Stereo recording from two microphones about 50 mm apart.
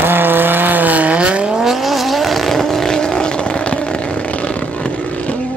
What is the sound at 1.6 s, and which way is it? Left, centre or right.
Vehicle, centre.